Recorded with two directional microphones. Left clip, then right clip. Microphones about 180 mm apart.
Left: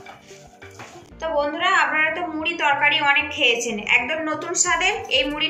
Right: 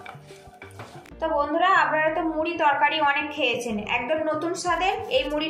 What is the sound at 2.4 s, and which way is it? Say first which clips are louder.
A woman's voice: left 2 dB; 35° right (ahead or behind).